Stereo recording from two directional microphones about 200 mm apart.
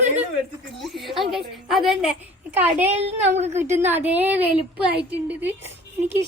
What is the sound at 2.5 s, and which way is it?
Speech, 10° right (ahead or behind).